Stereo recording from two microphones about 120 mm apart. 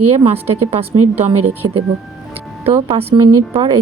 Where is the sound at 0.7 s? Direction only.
55° right (ahead or behind).